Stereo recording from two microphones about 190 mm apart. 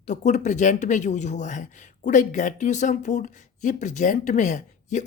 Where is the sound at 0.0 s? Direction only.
40° left (ahead or behind).